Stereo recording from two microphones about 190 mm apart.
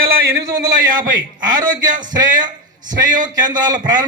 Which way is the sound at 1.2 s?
20° right (ahead or behind).